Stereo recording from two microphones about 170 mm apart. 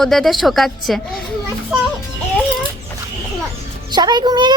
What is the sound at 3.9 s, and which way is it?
Speech, 25° right (ahead or behind).